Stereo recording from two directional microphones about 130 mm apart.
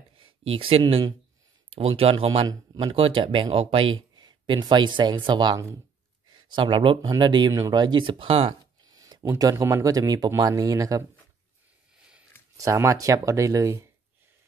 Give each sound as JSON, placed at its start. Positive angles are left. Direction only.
{"t": 0.2, "sound": "speech", "side_deg": -45}
{"t": 2.4, "sound": "a man's voice", "side_deg": -30}
{"t": 2.9, "sound": "speech", "side_deg": -45}
{"t": 8.8, "sound": "speech", "side_deg": -30}
{"t": 12.5, "sound": "speech", "side_deg": -25}